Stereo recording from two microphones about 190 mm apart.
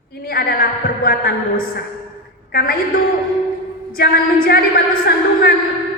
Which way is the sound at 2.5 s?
55° left (ahead or behind).